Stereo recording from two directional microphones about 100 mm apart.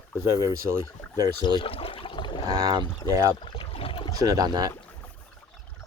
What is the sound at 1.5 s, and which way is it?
Water, 65° left (ahead or behind).